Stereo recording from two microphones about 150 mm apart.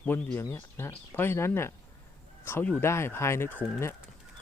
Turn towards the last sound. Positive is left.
turn(degrees=15)  # may be behind; listen again after turning